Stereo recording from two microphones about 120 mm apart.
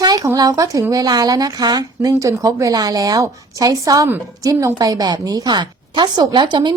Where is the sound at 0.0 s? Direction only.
35° right (ahead or behind).